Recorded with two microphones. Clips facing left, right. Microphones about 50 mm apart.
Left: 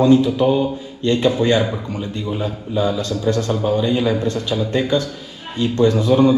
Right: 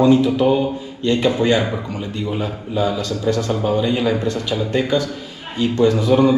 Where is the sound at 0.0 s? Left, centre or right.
Right.